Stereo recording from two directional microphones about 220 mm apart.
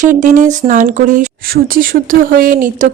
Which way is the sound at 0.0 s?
35° right (ahead or behind).